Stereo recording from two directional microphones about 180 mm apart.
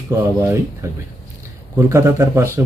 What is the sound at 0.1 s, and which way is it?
Speech, 15° right (ahead or behind).